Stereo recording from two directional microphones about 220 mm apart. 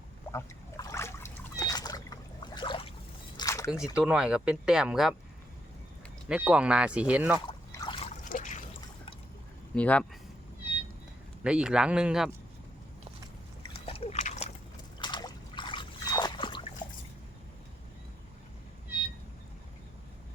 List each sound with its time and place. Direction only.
0.3 s splash: 15° left (ahead or behind)
3.3 s biting: 15° left (ahead or behind)
3.9 s speech: 5° right (ahead or behind)
6.2 s speech: 5° right (ahead or behind)
7.7 s trickle: 20° left (ahead or behind)
8.2 s trickle: 35° left (ahead or behind)
9.7 s speech: 5° left (ahead or behind)
11.4 s speech: 5° right (ahead or behind)
13.6 s a sound: 25° left (ahead or behind)
14.9 s trickle: 20° left (ahead or behind)